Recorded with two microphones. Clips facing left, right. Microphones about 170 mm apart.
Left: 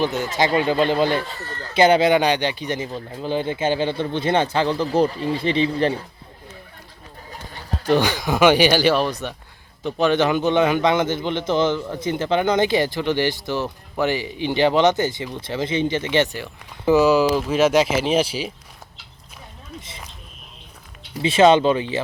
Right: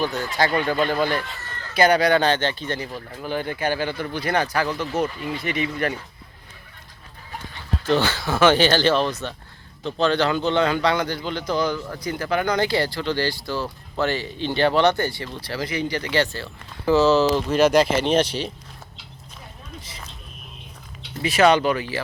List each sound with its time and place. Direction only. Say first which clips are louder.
0.0 s speech: left 2 dB; 20° left (ahead or behind)
7.9 s a man's voice: left 3 dB; 15° left (ahead or behind)
21.2 s speech: left 3 dB; 25° left (ahead or behind)